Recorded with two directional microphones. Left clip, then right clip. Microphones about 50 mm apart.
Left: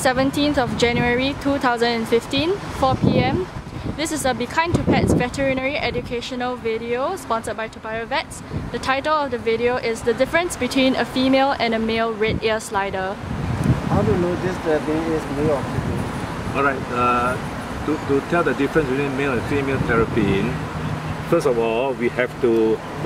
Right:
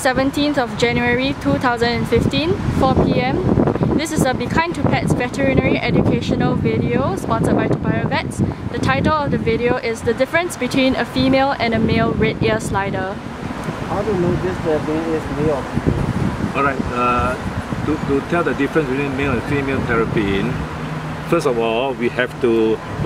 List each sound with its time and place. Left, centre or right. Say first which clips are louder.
0.0 s speech: right 2 dB; centre
16.5 s speech: right 1 dB; centre
21.3 s speech: right 1 dB; centre